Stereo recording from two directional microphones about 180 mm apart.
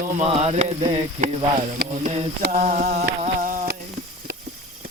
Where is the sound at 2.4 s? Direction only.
45° right (ahead or behind).